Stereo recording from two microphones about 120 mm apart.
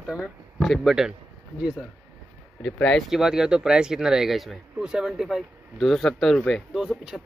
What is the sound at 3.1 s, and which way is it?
Speech, 5° right (ahead or behind).